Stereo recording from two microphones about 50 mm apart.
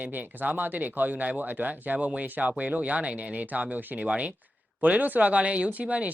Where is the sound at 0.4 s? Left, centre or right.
Right.